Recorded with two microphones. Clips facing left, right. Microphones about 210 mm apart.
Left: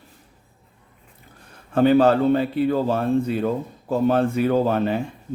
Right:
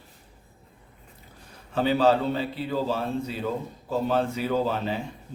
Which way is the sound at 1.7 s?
55° left (ahead or behind).